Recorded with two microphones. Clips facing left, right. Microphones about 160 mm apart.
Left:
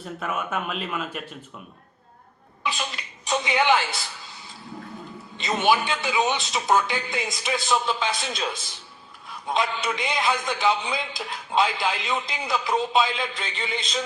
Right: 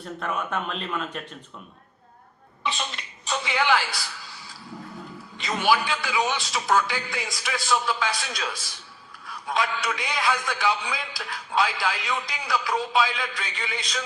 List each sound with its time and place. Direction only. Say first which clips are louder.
0.0 s speech: even; 5° left (ahead or behind)
2.6 s throat clearing: even; centre (ahead or behind)
3.2 s a sound: left 3 dB; 20° left (ahead or behind)
5.4 s a man's voice: left 1 dB; 20° left (ahead or behind)